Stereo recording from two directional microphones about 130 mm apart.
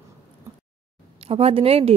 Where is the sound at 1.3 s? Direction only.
50° right (ahead or behind).